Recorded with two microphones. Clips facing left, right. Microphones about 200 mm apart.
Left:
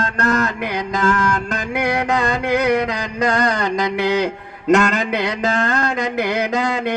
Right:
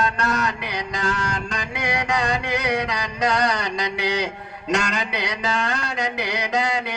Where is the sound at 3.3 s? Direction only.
50° left (ahead or behind).